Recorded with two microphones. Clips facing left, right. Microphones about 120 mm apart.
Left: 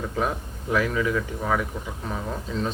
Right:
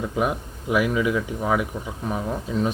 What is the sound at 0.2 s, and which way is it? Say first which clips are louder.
Speech: right 2 dB; 15° right (ahead or behind).